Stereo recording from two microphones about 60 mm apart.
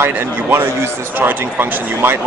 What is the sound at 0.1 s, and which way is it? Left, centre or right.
Speech, right.